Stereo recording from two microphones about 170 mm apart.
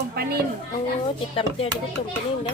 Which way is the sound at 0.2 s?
70° right (ahead or behind).